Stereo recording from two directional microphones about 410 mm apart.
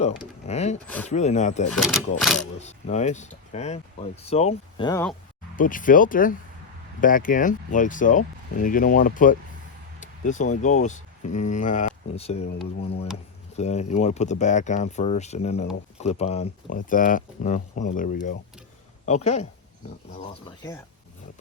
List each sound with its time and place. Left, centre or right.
0.0 s a sound: centre
1.0 s speech: centre
1.7 s speech: centre
2.6 s speech: centre
5.5 s speech: centre
10.0 s a sound: centre
10.6 s speech: centre